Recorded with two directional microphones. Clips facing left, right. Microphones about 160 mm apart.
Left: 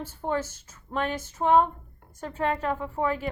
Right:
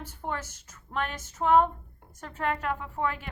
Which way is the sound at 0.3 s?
30° left (ahead or behind).